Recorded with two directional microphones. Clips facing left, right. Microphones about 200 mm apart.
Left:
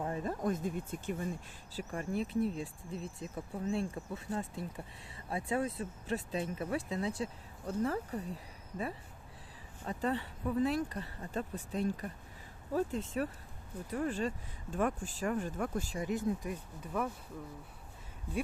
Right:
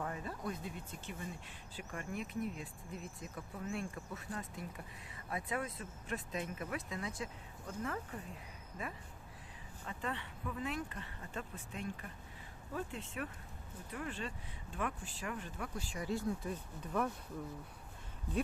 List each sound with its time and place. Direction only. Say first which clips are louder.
0.0 s a sound: left 5 dB; 30° left (ahead or behind)
0.3 s speech: left 8 dB; 45° left (ahead or behind)
1.7 s speech: left 7 dB; 35° left (ahead or behind)
9.8 s speech: left 8 dB; 35° left (ahead or behind)
16.0 s speech: left 2 dB; 15° left (ahead or behind)